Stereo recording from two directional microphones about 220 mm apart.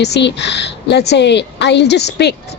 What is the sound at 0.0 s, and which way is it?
Speech, 50° left (ahead or behind).